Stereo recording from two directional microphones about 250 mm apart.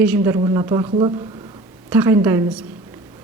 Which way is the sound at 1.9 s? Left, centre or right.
Centre.